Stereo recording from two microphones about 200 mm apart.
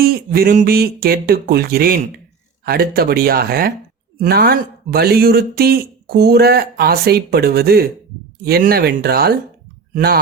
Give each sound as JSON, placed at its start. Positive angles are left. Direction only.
{"t": 0.0, "sound": "speech", "side_deg": -50}